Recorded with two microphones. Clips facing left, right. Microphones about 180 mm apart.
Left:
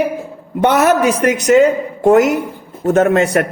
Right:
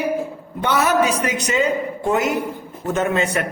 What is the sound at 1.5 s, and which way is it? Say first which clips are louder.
Speech: left 12 dB; 60° left (ahead or behind).